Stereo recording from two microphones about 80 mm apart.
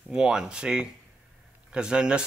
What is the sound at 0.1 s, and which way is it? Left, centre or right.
Speech, centre.